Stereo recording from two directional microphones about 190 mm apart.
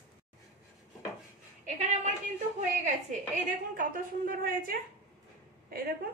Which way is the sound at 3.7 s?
45° right (ahead or behind).